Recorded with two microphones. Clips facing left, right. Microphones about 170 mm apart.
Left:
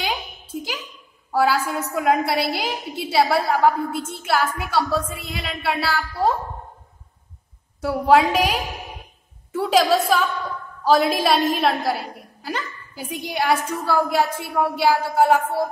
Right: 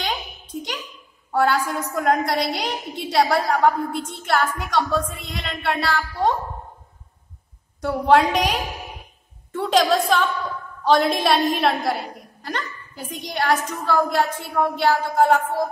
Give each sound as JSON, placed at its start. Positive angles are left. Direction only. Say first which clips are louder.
{"t": 0.0, "sound": "a sound", "louder": "left 1 dB", "side_deg": 5}
{"t": 1.3, "sound": "a woman's voice", "louder": "even", "side_deg": 5}
{"t": 7.8, "sound": "a woman's voice", "louder": "even", "side_deg": 5}